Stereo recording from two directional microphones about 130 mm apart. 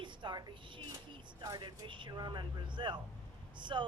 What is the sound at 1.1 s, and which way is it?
Speech, 35° right (ahead or behind).